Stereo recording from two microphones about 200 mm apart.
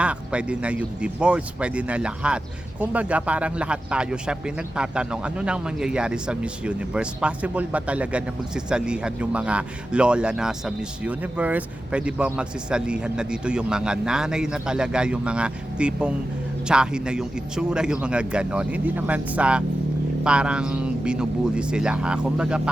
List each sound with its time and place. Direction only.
0.0 s speech: 5° right (ahead or behind)